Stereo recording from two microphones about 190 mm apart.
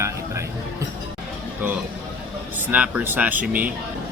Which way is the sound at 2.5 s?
5° right (ahead or behind).